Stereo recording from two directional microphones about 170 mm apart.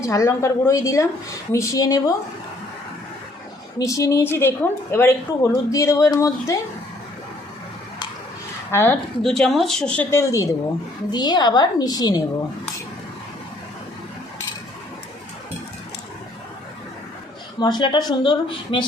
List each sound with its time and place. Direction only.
0.0 s a woman's voice: 15° left (ahead or behind)
3.8 s speech: 20° left (ahead or behind)
8.7 s speech: 15° left (ahead or behind)
9.2 s a woman's voice: centre (ahead or behind); by 12.2 s 25° left (ahead or behind)
17.6 s a woman's voice: 25° left (ahead or behind)